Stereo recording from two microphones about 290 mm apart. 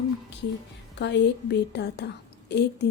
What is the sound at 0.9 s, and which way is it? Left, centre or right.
A woman's voice, left.